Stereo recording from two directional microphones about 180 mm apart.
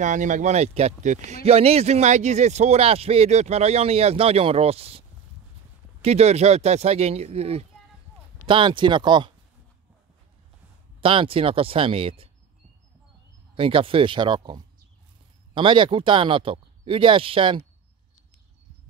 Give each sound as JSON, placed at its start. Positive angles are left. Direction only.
{"t": 0.0, "sound": "speech", "side_deg": -45}
{"t": 6.0, "sound": "speech", "side_deg": -35}
{"t": 11.0, "sound": "speech", "side_deg": -30}
{"t": 13.6, "sound": "speech", "side_deg": -30}